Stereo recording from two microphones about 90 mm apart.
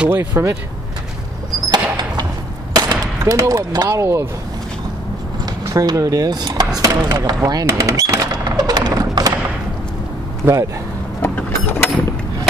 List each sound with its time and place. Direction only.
0.1 s speech: 25° right (ahead or behind)
1.7 s a sound: 50° right (ahead or behind)
2.7 s speech: 45° right (ahead or behind)
5.4 s speech: 45° right (ahead or behind)
6.8 s a sound: 50° right (ahead or behind)
10.4 s speech: 35° right (ahead or behind)
11.3 s mechanisms: 20° left (ahead or behind)